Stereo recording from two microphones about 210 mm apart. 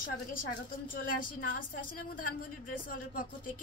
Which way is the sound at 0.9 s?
40° left (ahead or behind).